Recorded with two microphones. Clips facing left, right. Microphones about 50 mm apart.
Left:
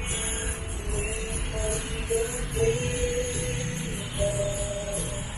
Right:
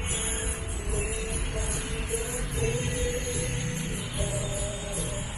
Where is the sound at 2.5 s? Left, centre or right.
Left.